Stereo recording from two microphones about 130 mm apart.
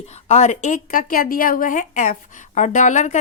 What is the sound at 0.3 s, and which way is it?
A woman's voice, 55° left (ahead or behind).